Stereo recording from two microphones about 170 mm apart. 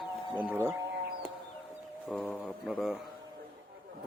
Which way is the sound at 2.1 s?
Centre (ahead or behind).